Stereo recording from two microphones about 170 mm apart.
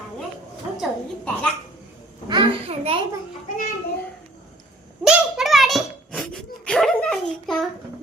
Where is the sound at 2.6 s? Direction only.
35° right (ahead or behind).